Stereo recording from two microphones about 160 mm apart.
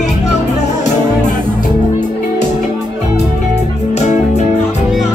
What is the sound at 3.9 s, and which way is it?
Music, 45° left (ahead or behind).